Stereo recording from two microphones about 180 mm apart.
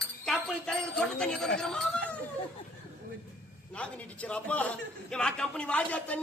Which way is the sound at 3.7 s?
5° left (ahead or behind).